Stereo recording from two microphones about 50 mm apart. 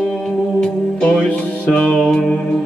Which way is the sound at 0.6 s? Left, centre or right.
Centre.